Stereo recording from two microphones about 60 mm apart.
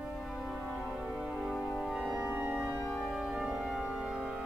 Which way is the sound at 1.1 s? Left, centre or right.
Centre.